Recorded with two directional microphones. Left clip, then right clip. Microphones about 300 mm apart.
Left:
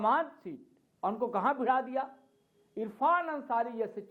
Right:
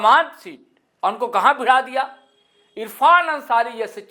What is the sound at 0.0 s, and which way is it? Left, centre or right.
Speech, centre.